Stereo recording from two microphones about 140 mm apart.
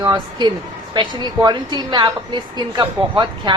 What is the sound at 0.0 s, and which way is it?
A woman's voice, 30° right (ahead or behind).